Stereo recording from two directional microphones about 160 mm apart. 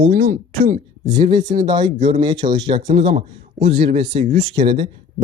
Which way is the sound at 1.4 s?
50° right (ahead or behind).